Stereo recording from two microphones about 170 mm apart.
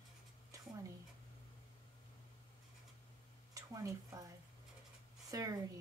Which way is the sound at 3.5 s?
20° right (ahead or behind).